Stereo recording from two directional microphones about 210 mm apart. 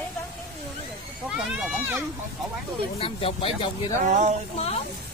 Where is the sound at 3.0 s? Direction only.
25° left (ahead or behind).